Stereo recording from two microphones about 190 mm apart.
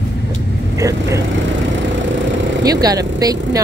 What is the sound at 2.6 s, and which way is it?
Speech, 20° right (ahead or behind).